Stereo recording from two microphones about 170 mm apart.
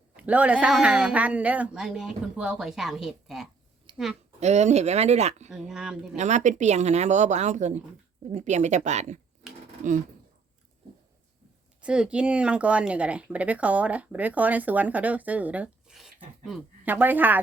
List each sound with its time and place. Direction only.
0.2 s speech: 10° right (ahead or behind)
4.4 s speech: 40° right (ahead or behind)
5.5 s speech: 5° right (ahead or behind)
6.1 s speech: 45° right (ahead or behind)
9.4 s a sound: 5° right (ahead or behind)
11.8 s speech: 5° right (ahead or behind)